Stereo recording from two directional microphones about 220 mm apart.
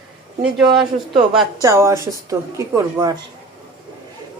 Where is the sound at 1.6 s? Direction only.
15° right (ahead or behind).